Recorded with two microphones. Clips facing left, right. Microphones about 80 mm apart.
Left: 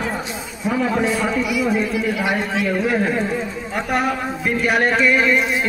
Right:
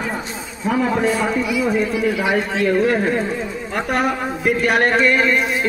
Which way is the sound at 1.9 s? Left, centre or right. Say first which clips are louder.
Right 2 dB; centre.